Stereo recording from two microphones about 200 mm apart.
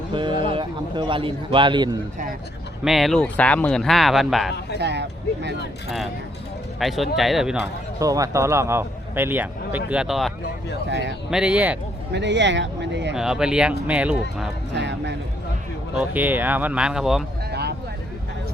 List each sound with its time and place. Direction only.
0.1 s a man's voice: 25° right (ahead or behind)
2.8 s speech: centre (ahead or behind)
4.8 s speech: 60° right (ahead or behind)
6.7 s speech: centre (ahead or behind)
7.9 s a man's voice: 15° right (ahead or behind); by 10.3 s centre (ahead or behind)
10.8 s speech: 65° right (ahead or behind)
11.3 s speech: 5° right (ahead or behind)
12.1 s speech: 60° right (ahead or behind)
13.1 s speech: 5° right (ahead or behind)
14.7 s speech: 60° right (ahead or behind)
16.0 s a man's voice: 10° right (ahead or behind)
17.5 s vehicle: 55° right (ahead or behind)